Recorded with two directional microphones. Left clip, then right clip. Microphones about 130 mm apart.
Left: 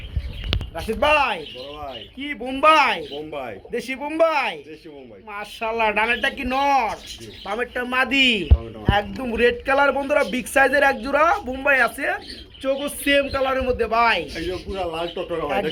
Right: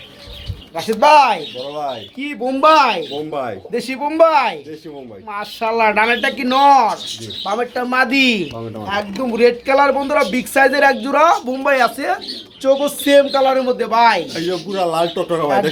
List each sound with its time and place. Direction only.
0.8 s speech: 15° left (ahead or behind); by 6.9 s 10° right (ahead or behind)
7.4 s speech: 5° left (ahead or behind)
14.3 s speech: 45° right (ahead or behind)
14.8 s speech: 80° right